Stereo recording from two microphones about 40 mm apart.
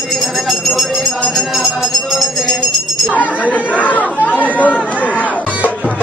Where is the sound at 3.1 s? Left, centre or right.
Left.